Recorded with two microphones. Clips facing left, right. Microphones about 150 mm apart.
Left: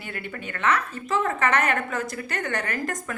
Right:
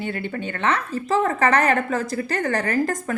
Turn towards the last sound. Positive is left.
turn(degrees=-35)  # may be behind; listen again after turning